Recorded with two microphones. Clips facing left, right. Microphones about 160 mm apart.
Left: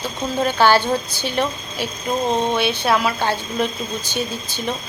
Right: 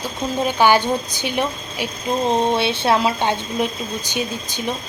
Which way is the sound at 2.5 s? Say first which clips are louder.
Right 1 dB; 30° right (ahead or behind).